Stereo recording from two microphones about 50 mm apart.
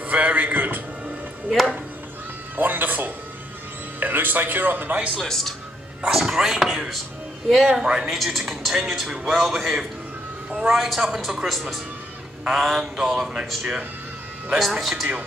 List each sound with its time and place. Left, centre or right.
0.1 s music: right
1.5 s speech: centre
2.5 s a sound: right
4.0 s speech: right
5.1 s a man's voice: centre
6.0 s speech: centre
8.1 s speech: centre
14.8 s speech: centre